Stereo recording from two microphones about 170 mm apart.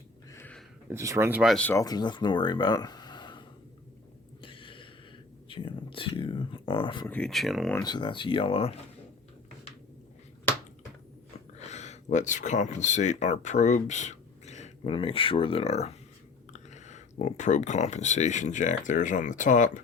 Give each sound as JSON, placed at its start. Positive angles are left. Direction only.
{"t": 0.3, "sound": "a sound", "side_deg": 15}
{"t": 0.9, "sound": "speech", "side_deg": -15}
{"t": 1.4, "sound": "speech", "side_deg": 0}
{"t": 1.6, "sound": "speech", "side_deg": 20}
{"t": 4.4, "sound": "a sound", "side_deg": 30}
{"t": 7.1, "sound": "speech", "side_deg": 5}
{"t": 7.7, "sound": "speech", "side_deg": 20}
{"t": 11.7, "sound": "speech", "side_deg": 40}